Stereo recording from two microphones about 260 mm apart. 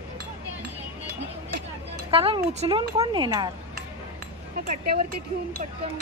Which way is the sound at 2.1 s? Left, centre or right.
Right.